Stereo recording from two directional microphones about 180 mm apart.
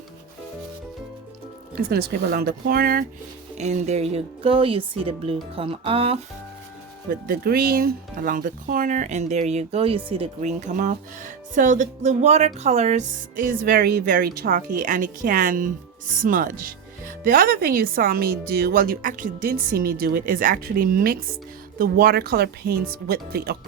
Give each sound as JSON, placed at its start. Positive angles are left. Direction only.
{"t": 1.9, "sound": "speech", "side_deg": -60}
{"t": 3.6, "sound": "speech", "side_deg": -40}
{"t": 7.1, "sound": "speech", "side_deg": -55}